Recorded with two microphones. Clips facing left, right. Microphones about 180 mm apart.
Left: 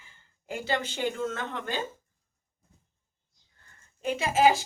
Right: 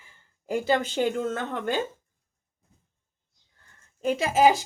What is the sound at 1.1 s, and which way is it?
Speech, 45° right (ahead or behind).